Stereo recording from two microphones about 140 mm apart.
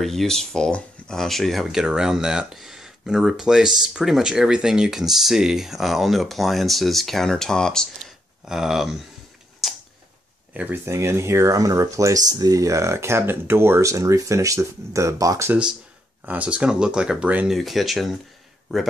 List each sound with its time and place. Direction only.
0.0 s speech: centre (ahead or behind)
9.6 s a sound: centre (ahead or behind)
10.5 s speech: 15° right (ahead or behind)
16.3 s speech: 10° right (ahead or behind)